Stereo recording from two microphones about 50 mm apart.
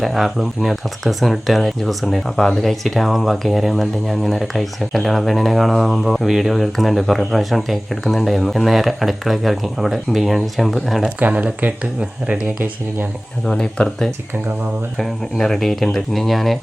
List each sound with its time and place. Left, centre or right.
0.0 s speech: centre
11.3 s speech: right
12.5 s speech: right
13.4 s speech: centre
14.9 s speech: centre